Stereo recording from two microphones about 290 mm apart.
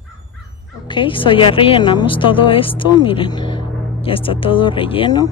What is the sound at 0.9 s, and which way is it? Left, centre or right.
A woman's voice, centre.